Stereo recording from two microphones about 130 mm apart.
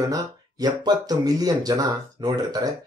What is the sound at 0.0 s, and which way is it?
Speech, 30° right (ahead or behind).